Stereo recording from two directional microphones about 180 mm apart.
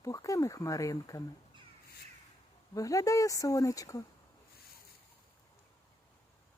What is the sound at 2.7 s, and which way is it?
Speech, 20° left (ahead or behind).